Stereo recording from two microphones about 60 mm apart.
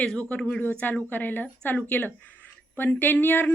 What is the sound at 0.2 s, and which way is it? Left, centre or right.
A woman's voice, left.